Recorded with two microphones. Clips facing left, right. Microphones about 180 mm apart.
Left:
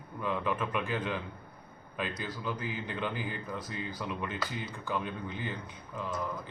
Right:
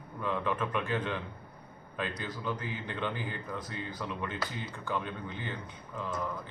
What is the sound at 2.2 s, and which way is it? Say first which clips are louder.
A man's voice: even; 5° left (ahead or behind).